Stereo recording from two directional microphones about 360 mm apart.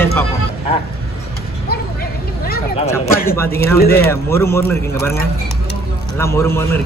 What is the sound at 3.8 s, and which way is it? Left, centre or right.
Speech, left.